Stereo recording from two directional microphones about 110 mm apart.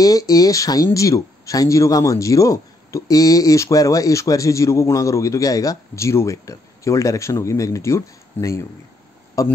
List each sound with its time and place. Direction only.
0.0 s a man's voice: 30° left (ahead or behind)